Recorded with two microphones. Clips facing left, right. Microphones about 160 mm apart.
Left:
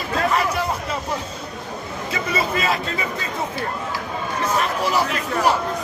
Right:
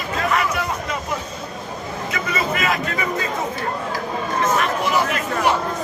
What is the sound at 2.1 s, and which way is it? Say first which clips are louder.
Speech: left 1 dB; 30° left (ahead or behind).